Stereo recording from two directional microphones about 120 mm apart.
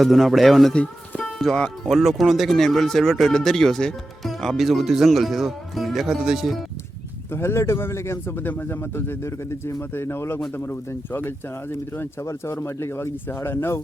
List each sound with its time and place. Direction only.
0.0 s speech: centre (ahead or behind)
7.3 s speech: 20° left (ahead or behind)